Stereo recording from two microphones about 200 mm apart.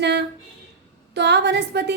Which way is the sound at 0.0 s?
60° right (ahead or behind).